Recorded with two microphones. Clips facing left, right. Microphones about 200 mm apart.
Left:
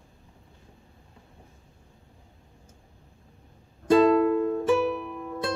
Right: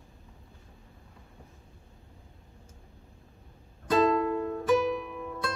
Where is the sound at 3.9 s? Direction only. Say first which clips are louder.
Left 6 dB; 30° left (ahead or behind).